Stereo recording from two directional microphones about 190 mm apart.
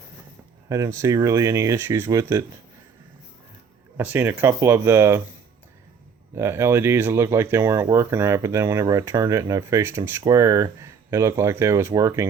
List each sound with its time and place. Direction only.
0.7 s speech: 15° right (ahead or behind)
3.9 s speech: 10° right (ahead or behind)
6.3 s speech: 15° right (ahead or behind)